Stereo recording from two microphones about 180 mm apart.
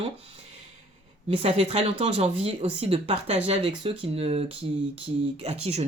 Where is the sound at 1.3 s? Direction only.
35° right (ahead or behind).